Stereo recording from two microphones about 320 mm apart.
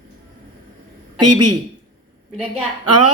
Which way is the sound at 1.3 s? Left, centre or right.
Right.